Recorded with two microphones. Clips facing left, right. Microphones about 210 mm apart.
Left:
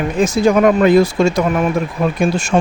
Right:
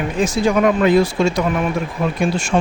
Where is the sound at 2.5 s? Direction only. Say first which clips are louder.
Left 3 dB; 45° left (ahead or behind).